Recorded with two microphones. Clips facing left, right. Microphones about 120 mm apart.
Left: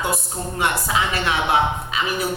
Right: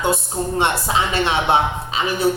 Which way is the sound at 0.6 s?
25° right (ahead or behind).